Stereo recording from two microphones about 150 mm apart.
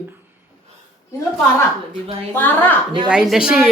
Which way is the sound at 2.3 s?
10° left (ahead or behind).